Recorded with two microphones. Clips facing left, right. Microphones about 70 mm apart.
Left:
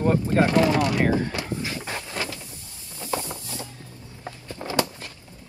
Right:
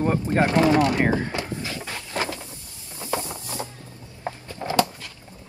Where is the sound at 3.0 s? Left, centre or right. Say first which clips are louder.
Right 1 dB; right.